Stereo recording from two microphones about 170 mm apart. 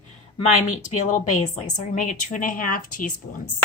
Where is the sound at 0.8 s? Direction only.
45° left (ahead or behind).